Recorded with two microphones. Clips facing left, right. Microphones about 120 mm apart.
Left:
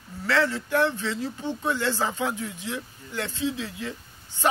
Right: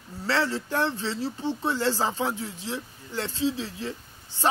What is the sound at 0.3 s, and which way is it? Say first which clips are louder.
Speech: left 2 dB; 30° right (ahead or behind).